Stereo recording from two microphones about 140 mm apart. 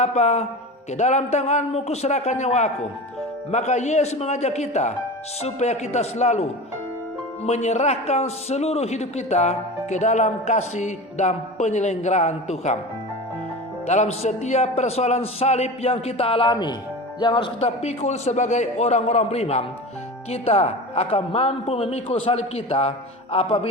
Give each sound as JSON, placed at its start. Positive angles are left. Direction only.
{"t": 0.0, "sound": "a man's voice", "side_deg": 55}
{"t": 13.8, "sound": "a man's voice", "side_deg": 55}